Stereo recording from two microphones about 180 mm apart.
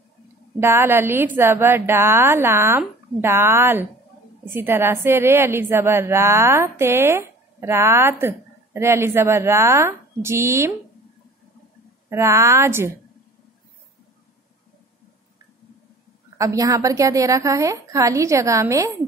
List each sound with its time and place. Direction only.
0.6 s a woman's voice: 15° right (ahead or behind)
12.1 s a woman's voice: 15° right (ahead or behind)
16.3 s a woman's voice: 20° right (ahead or behind)